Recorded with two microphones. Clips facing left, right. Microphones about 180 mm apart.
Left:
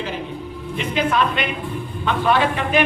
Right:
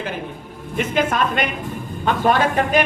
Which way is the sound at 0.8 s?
45° right (ahead or behind).